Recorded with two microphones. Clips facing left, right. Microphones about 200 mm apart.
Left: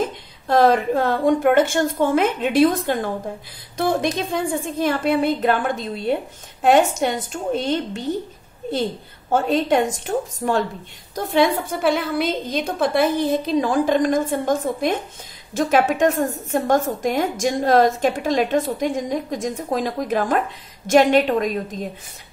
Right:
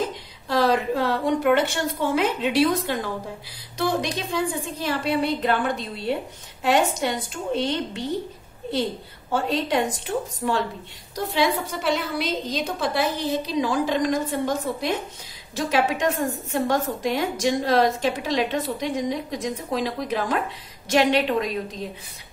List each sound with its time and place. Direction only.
0.5 s a woman's voice: 50° left (ahead or behind)
9.3 s a woman's voice: 45° left (ahead or behind)